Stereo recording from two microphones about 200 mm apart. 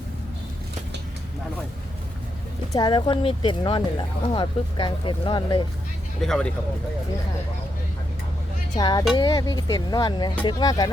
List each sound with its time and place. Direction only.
2.7 s speech: 20° left (ahead or behind)
6.2 s speech: 5° left (ahead or behind)
8.7 s speech: 20° left (ahead or behind)